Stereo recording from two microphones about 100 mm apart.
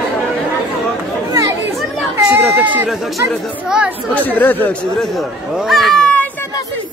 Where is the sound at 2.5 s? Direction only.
15° right (ahead or behind).